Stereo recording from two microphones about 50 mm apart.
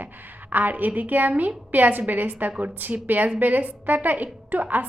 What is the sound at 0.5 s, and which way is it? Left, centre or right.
A woman's voice, right.